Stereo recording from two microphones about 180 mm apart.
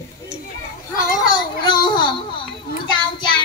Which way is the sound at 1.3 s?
25° left (ahead or behind).